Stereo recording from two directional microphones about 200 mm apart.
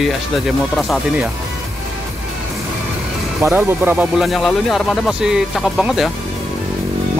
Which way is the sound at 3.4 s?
10° right (ahead or behind).